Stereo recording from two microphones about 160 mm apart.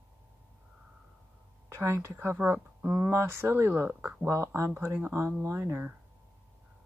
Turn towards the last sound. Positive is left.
turn(degrees=-15)  # may be behind; listen again after turning